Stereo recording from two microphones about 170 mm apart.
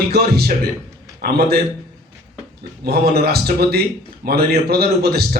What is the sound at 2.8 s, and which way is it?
A man's voice, 65° right (ahead or behind).